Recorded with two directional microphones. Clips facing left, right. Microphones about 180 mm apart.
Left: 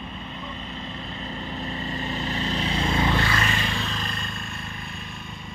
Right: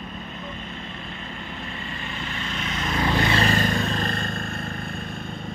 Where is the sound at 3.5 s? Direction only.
45° right (ahead or behind).